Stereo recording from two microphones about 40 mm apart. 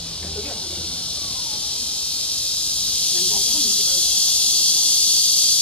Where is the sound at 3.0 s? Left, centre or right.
Left.